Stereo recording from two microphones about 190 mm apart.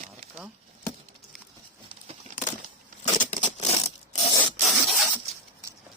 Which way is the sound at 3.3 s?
40° left (ahead or behind).